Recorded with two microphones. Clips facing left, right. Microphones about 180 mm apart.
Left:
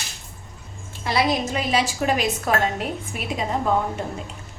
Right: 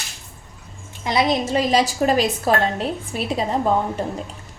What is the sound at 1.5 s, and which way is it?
A woman's voice, 35° right (ahead or behind).